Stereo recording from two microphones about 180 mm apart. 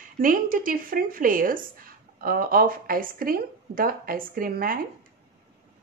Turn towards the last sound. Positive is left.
turn(degrees=-55)  # may be behind; listen again after turning